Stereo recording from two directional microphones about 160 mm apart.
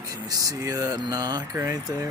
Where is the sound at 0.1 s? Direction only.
20° right (ahead or behind).